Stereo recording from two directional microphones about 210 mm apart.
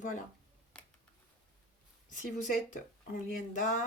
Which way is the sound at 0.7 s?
5° left (ahead or behind).